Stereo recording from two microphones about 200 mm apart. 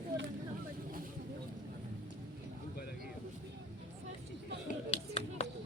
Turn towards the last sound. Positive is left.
turn(degrees=30)  # may be behind; listen again after turning